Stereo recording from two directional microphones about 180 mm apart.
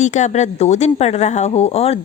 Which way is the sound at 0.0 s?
40° left (ahead or behind).